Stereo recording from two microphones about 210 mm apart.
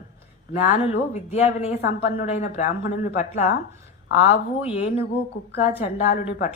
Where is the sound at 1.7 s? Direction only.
45° left (ahead or behind).